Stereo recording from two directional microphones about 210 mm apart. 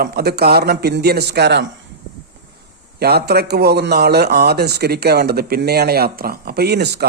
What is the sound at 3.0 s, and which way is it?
A man's voice, 50° right (ahead or behind).